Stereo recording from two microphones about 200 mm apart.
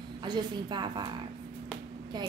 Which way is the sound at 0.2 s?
20° right (ahead or behind).